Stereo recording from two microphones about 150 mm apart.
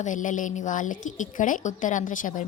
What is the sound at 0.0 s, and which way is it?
A woman's voice, 55° left (ahead or behind).